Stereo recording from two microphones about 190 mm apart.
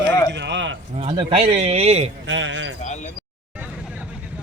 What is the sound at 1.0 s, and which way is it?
A man's voice, 30° right (ahead or behind).